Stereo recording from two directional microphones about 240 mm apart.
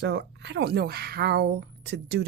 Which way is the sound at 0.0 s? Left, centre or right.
Right.